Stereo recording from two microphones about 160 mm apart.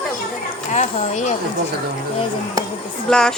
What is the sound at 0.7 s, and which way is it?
Speech, 50° left (ahead or behind).